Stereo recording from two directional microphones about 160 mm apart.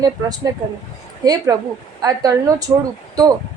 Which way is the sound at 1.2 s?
25° right (ahead or behind).